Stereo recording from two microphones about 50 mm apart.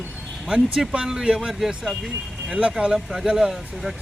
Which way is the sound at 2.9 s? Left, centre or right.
Centre.